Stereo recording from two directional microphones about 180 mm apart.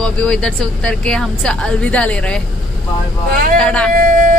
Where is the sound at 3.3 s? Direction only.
55° right (ahead or behind).